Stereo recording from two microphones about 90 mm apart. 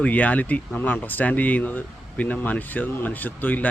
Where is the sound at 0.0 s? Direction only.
15° left (ahead or behind).